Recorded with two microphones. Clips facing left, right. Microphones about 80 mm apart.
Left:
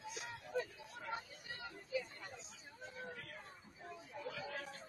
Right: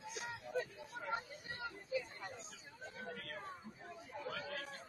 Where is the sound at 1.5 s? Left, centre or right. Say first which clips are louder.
Right 1 dB; right.